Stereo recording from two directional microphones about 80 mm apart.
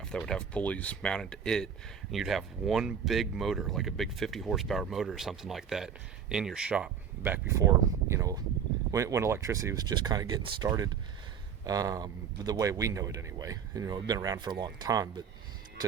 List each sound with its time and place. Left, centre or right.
0.0 s speech: centre
2.1 s speech: centre
7.2 s speech: right
8.1 s speech: right
9.7 s speech: right
11.6 s speech: right